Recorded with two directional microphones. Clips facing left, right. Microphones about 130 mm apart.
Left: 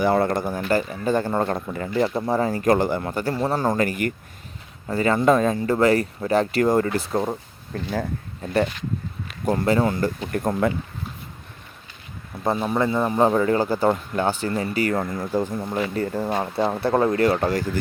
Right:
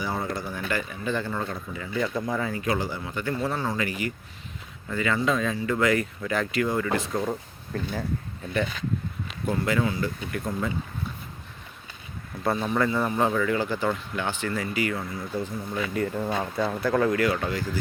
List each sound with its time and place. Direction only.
0.0 s a man's voice: 65° left (ahead or behind)
1.8 s a man's voice: 35° left (ahead or behind); by 3.2 s 55° left (ahead or behind)
3.2 s a man's voice: 35° left (ahead or behind)
4.9 s speech: 40° left (ahead or behind)
6.6 s speech: 45° left (ahead or behind)
9.5 s speech: 35° left (ahead or behind)
10.3 s speech: 60° left (ahead or behind)
12.4 s speech: 25° left (ahead or behind); by 15.8 s 45° left (ahead or behind)
15.8 s speech: 35° left (ahead or behind)